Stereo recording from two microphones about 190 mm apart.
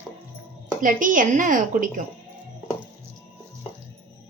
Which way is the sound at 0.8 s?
45° right (ahead or behind).